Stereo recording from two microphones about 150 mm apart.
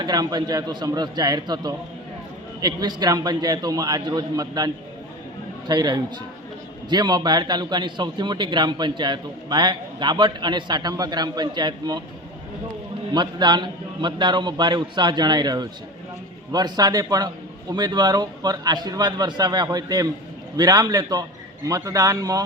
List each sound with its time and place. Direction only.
0.0 s a man's voice: 25° right (ahead or behind)
13.1 s a man's voice: 30° right (ahead or behind)